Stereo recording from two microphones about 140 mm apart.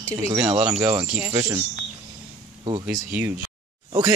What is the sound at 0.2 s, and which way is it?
Speech, 20° right (ahead or behind).